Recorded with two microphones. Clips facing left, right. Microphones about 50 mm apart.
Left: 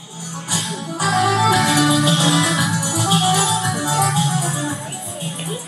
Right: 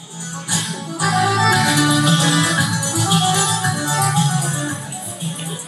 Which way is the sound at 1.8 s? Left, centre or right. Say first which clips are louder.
Even; right.